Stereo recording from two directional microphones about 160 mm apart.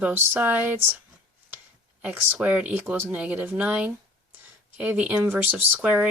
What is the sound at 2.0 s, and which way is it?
Speech, 10° right (ahead or behind).